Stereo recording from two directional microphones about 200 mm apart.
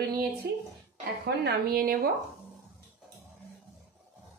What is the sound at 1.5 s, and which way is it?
Speech, 50° right (ahead or behind).